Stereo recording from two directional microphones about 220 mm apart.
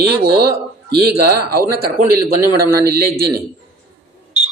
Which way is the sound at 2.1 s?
10° right (ahead or behind).